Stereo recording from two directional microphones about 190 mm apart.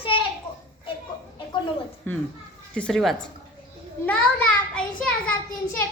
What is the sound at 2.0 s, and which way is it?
A child's voice, 10° left (ahead or behind).